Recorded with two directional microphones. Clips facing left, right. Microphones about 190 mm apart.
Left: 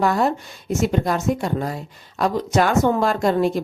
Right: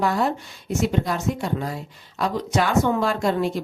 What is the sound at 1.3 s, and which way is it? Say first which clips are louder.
Speech: left 3 dB; 45° left (ahead or behind).